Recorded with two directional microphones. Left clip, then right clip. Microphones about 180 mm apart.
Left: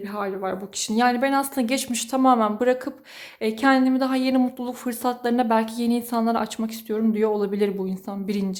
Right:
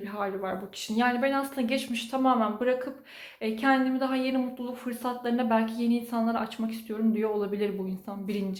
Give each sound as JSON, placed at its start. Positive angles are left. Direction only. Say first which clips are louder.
{"t": 0.2, "sound": "speech", "louder": "left 4 dB", "side_deg": 50}